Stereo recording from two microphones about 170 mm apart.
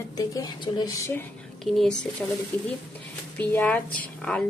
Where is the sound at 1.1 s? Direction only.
10° left (ahead or behind).